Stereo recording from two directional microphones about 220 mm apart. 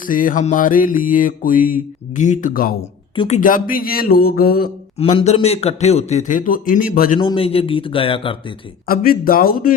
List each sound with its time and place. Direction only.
0.0 s mantra: 40° left (ahead or behind)
4.9 s mantra: 30° left (ahead or behind)
7.2 s speech: 25° left (ahead or behind)
8.9 s mantra: 40° left (ahead or behind)